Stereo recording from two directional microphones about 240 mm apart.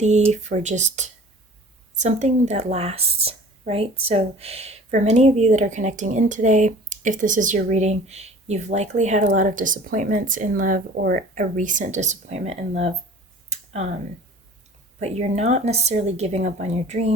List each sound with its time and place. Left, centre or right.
0.3 s speech: right
14.9 s speech: right